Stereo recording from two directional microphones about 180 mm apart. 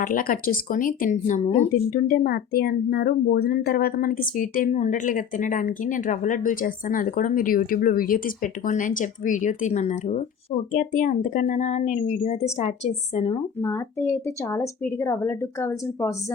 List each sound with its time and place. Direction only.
0.0 s speech: 50° left (ahead or behind)
1.9 s speech: 55° left (ahead or behind); by 13.4 s 35° left (ahead or behind)
13.6 s a woman's voice: 15° left (ahead or behind)